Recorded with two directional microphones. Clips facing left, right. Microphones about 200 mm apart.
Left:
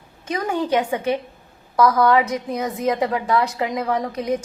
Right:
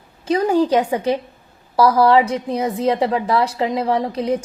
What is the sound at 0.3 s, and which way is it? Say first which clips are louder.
A woman's voice: right 6 dB; 35° right (ahead or behind).